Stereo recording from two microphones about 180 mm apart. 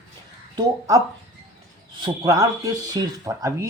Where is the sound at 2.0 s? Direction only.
20° right (ahead or behind).